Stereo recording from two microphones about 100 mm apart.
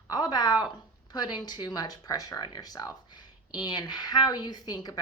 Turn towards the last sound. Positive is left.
turn(degrees=40)  # may be behind; listen again after turning